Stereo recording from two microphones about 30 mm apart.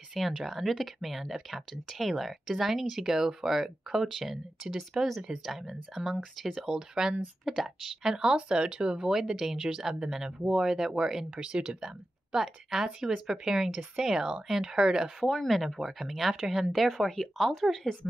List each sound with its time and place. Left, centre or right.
0.2 s speech: centre
6.6 s speech: centre
7.4 s speech: centre
8.2 s speech: right
9.0 s speech: centre
11.3 s speech: right
12.4 s speech: centre
15.2 s speech: centre
16.7 s speech: centre